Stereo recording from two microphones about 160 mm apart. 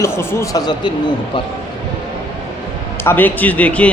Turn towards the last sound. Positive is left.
turn(degrees=10)  # may be behind; listen again after turning